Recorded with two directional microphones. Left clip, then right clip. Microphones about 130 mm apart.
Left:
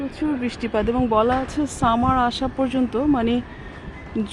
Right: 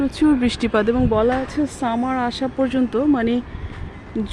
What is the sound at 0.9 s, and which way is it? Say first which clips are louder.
Speech: left 2 dB; 30° right (ahead or behind).